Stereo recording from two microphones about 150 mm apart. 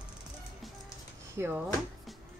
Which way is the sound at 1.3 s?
15° right (ahead or behind).